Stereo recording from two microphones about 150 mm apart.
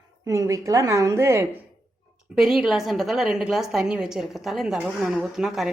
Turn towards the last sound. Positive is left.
turn(degrees=0)  # may be behind; listen again after turning